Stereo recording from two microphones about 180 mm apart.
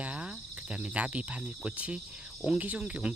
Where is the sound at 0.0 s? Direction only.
5° right (ahead or behind).